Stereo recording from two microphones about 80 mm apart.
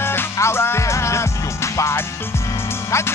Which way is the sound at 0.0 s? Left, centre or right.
Left.